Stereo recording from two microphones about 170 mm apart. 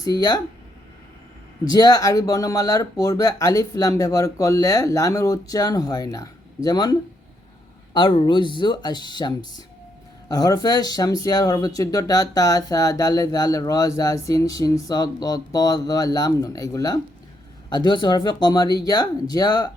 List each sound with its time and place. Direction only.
0.0 s speech: 25° left (ahead or behind)
1.6 s speech: 25° left (ahead or behind)
7.9 s speech: 30° left (ahead or behind)